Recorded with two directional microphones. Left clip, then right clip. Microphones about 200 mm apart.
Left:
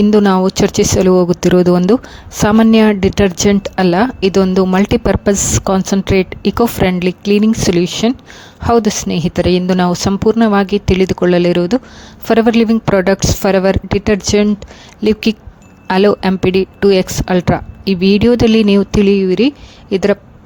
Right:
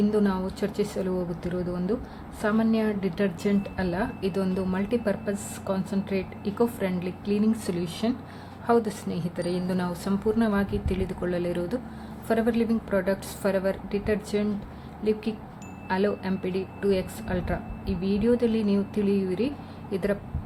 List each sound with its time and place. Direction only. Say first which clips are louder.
0.1 s a woman's voice: left 16 dB; 50° left (ahead or behind)